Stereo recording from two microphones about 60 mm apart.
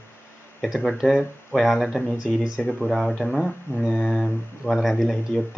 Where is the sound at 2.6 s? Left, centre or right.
Centre.